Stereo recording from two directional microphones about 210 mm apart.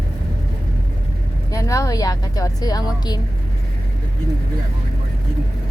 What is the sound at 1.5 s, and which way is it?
A woman's voice, 15° left (ahead or behind).